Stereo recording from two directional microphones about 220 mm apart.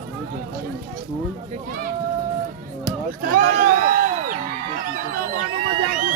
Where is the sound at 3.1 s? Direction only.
40° right (ahead or behind).